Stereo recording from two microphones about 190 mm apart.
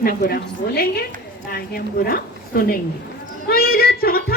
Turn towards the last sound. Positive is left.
turn(degrees=55)  # may be behind; listen again after turning